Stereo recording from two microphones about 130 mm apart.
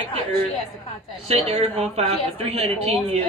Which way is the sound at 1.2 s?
55° right (ahead or behind).